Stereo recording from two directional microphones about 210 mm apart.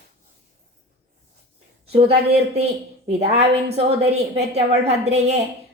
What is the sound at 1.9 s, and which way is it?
A woman's voice, 25° right (ahead or behind).